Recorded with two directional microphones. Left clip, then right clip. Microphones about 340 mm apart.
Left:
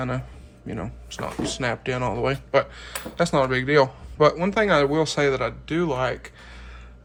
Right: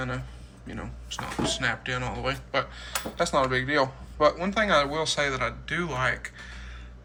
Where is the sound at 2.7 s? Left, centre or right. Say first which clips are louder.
Right 1 dB; left.